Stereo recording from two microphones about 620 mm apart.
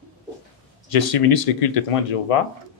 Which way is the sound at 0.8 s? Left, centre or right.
Left.